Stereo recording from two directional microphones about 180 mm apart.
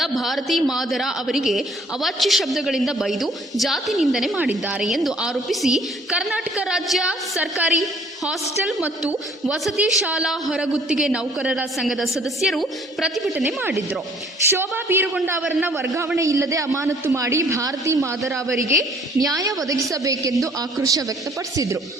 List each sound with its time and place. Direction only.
0.0 s a woman's voice: centre (ahead or behind)
13.6 s a man's voice: 10° right (ahead or behind)